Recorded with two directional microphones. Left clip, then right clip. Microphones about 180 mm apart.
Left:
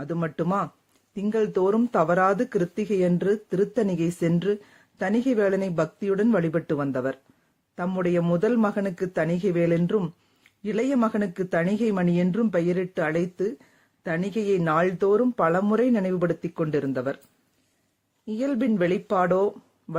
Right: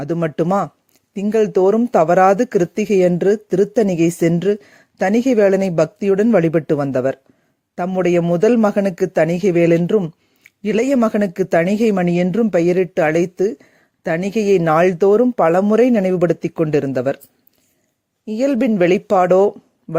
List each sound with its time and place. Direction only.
0.0 s speech: 40° right (ahead or behind)
18.3 s speech: 40° right (ahead or behind)